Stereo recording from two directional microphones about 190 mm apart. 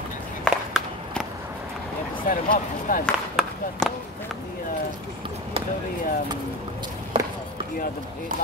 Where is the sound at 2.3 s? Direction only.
45° left (ahead or behind).